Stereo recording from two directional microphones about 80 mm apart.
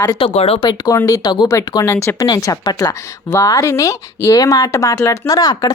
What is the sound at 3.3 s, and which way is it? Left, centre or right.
Speech, left.